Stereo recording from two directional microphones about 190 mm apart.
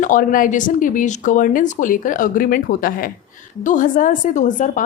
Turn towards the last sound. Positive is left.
turn(degrees=40)  # may be behind; listen again after turning